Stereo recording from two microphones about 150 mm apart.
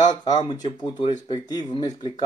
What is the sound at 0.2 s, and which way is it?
Speech, 30° left (ahead or behind).